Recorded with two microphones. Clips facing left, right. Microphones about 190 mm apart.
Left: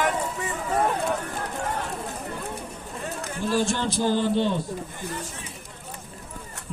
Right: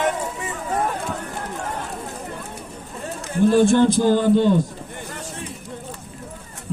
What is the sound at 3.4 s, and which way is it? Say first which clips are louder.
A man's voice: right 11 dB; 55° right (ahead or behind).